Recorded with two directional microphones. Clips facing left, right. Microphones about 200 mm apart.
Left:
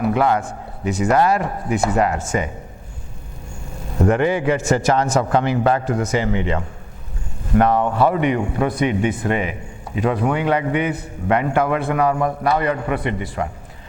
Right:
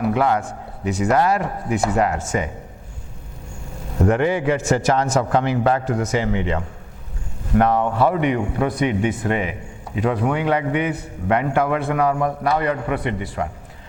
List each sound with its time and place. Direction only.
0.0 s a man's voice: 15° left (ahead or behind)
4.0 s a man's voice: 15° left (ahead or behind)